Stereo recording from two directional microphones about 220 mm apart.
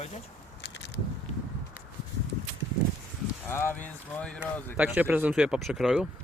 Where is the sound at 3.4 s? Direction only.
10° left (ahead or behind).